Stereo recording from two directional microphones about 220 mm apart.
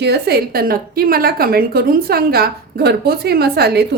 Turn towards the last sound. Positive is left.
turn(degrees=-45)  # may be behind; listen again after turning